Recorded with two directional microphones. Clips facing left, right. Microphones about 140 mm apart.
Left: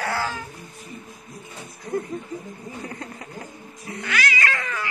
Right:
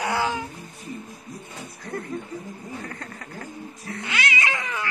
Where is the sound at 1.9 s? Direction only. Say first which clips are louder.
Left 6 dB; 15° left (ahead or behind).